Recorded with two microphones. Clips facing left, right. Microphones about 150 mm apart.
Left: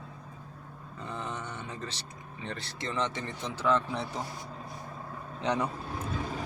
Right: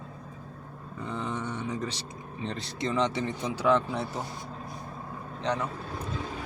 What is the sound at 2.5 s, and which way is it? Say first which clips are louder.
Speech: right 5 dB; 15° right (ahead or behind).